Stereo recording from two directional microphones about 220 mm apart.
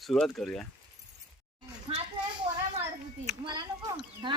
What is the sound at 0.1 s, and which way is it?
Speech, centre (ahead or behind).